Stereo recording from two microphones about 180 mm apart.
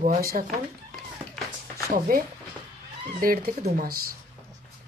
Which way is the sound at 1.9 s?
50° right (ahead or behind).